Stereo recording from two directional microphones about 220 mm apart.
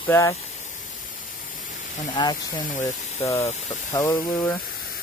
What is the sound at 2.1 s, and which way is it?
Speech, 20° left (ahead or behind).